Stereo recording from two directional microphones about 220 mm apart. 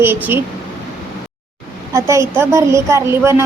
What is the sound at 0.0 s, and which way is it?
Speech, 10° right (ahead or behind).